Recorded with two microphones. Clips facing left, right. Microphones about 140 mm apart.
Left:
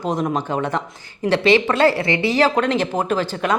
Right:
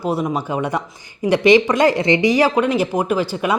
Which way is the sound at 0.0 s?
10° right (ahead or behind).